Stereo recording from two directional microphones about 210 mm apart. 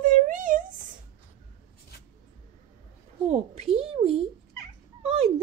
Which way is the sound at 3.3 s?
30° right (ahead or behind).